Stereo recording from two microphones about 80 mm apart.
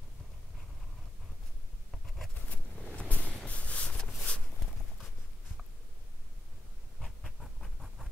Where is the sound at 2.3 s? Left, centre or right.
Centre.